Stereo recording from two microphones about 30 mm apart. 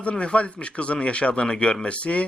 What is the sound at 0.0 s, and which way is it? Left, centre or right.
Speech, left.